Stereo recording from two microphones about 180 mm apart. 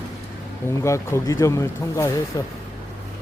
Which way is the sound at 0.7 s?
15° left (ahead or behind).